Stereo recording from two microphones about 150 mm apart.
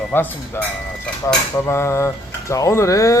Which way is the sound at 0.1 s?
15° left (ahead or behind).